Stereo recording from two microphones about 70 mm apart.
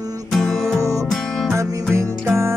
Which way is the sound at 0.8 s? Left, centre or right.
Right.